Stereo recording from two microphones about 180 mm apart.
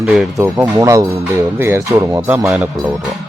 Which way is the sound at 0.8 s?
15° right (ahead or behind).